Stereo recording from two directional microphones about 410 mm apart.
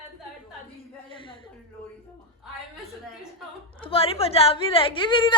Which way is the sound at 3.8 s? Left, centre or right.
Centre.